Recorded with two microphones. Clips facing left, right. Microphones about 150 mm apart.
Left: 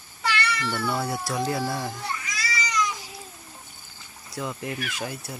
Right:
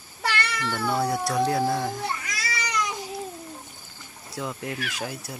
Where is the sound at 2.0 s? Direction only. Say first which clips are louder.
Right 2 dB; 60° right (ahead or behind).